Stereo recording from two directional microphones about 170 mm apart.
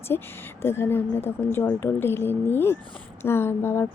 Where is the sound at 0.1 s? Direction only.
15° left (ahead or behind).